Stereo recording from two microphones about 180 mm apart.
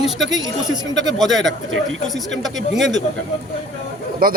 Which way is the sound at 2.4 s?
Centre (ahead or behind).